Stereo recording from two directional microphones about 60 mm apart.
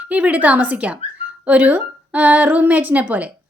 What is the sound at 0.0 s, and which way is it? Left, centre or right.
Speech, right.